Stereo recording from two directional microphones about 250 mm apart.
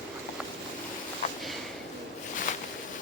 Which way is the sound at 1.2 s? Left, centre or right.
Left.